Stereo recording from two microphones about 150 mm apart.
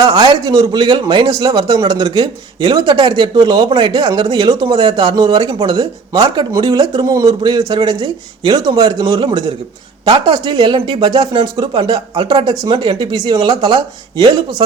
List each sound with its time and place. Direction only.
0.0 s speech: 30° right (ahead or behind)